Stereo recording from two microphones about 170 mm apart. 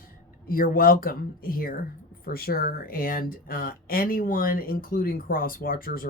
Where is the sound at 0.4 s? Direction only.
55° left (ahead or behind).